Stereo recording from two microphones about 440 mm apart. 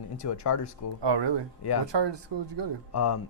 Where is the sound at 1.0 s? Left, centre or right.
Right.